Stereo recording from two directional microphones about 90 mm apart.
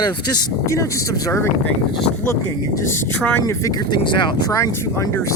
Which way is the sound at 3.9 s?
60° left (ahead or behind).